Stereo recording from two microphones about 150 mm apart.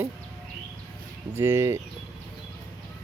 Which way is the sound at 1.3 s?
15° right (ahead or behind).